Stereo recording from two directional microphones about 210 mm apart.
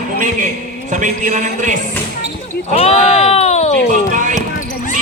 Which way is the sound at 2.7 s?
30° left (ahead or behind).